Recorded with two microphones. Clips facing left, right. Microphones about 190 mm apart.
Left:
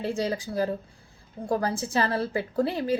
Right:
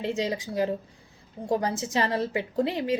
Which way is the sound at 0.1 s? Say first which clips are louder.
Even; 20° right (ahead or behind).